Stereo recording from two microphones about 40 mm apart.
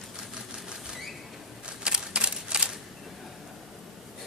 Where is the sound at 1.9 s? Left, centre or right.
Right.